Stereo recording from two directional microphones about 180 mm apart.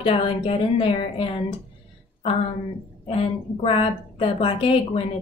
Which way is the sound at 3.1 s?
35° left (ahead or behind).